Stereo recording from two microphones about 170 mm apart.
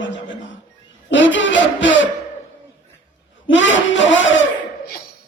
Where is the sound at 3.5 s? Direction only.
90° left.